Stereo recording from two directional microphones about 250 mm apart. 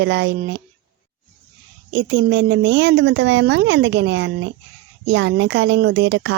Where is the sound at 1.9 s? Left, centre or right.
Right.